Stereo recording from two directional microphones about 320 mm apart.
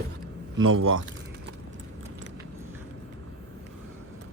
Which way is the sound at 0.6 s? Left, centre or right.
Right.